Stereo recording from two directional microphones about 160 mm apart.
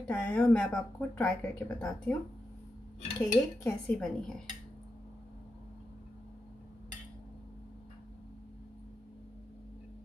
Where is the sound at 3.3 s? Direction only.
15° left (ahead or behind).